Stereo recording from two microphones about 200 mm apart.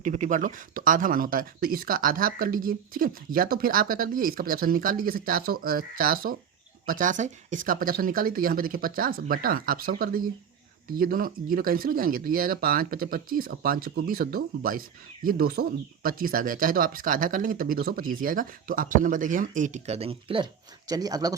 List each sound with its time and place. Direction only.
0.0 s speech: 40° right (ahead or behind); by 21.3 s 20° right (ahead or behind)